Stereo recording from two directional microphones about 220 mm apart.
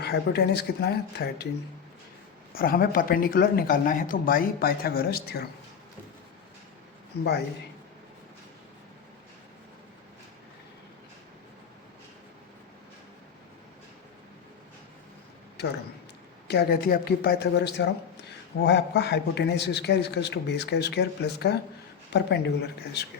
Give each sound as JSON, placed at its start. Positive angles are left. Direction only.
{"t": 0.0, "sound": "a man's voice", "side_deg": 50}
{"t": 2.6, "sound": "speech", "side_deg": 40}
{"t": 7.1, "sound": "a man's voice", "side_deg": 45}
{"t": 16.5, "sound": "a man's voice", "side_deg": 45}